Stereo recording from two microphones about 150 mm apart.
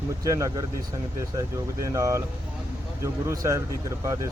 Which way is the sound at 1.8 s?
20° right (ahead or behind).